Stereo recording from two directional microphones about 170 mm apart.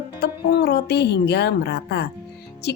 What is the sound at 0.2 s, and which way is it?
A woman's voice, 80° left.